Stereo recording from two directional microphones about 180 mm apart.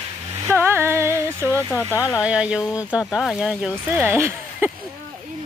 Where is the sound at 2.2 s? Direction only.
5° right (ahead or behind).